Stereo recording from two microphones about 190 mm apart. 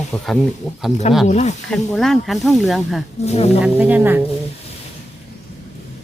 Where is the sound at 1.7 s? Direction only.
Centre (ahead or behind).